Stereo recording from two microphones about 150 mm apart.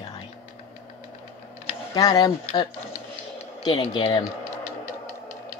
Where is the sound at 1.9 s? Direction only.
25° left (ahead or behind).